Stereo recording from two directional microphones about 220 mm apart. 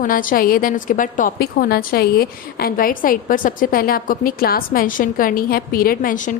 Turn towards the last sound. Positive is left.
turn(degrees=35)  # may be behind; listen again after turning